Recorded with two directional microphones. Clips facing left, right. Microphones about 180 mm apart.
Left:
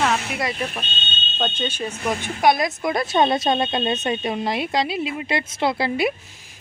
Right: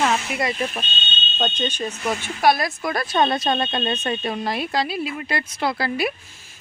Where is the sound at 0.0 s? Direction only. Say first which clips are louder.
Right 1 dB; 5° right (ahead or behind); by 6.1 s 20° left (ahead or behind).